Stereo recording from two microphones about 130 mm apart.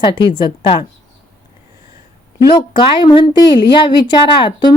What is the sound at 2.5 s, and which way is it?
A woman's voice, 40° left (ahead or behind).